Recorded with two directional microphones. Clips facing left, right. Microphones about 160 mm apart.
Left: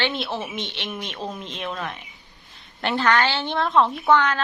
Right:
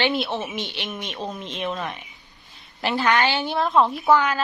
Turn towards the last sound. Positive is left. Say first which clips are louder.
# even
turn(degrees=-5)  # may be behind; listen again after turning